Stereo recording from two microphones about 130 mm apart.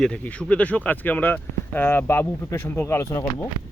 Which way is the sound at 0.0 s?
10° left (ahead or behind).